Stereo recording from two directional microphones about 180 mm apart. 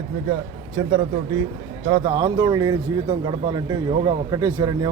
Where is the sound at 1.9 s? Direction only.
20° right (ahead or behind).